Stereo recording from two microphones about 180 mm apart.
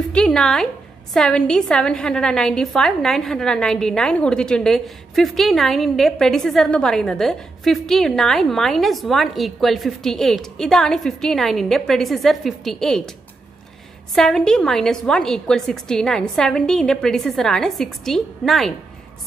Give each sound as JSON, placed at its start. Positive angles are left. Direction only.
{"t": 0.1, "sound": "a woman's voice", "side_deg": 5}
{"t": 14.1, "sound": "a woman's voice", "side_deg": 5}